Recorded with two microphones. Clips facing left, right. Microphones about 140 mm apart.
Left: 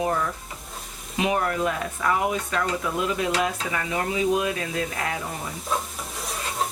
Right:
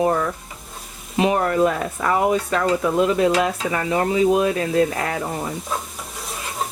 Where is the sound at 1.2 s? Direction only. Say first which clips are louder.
Right 6 dB; 40° right (ahead or behind).